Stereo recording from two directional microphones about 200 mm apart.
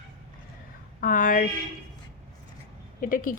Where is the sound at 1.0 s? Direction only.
40° left (ahead or behind).